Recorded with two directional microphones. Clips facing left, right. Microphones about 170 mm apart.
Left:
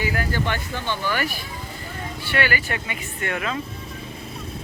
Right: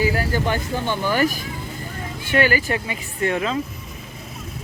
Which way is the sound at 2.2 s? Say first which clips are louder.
Right 5 dB; 40° right (ahead or behind).